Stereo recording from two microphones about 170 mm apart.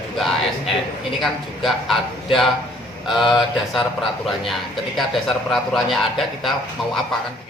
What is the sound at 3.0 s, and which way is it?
A man's voice, centre (ahead or behind).